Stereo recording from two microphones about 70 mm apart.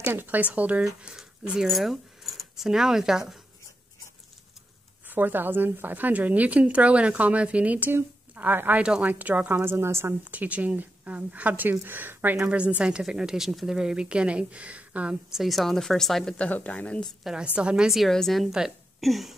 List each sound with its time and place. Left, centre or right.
0.0 s a woman's voice: right
0.8 s speech: centre
5.0 s a woman's voice: right
9.7 s a woman's voice: right
10.3 s a woman's voice: right
15.3 s a woman's voice: centre
16.3 s speech: left
17.2 s a woman's voice: centre